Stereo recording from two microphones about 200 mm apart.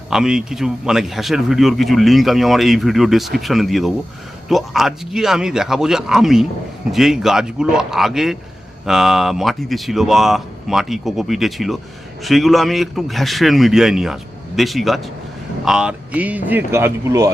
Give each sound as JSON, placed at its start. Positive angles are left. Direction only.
{"t": 0.1, "sound": "a man's voice", "side_deg": -5}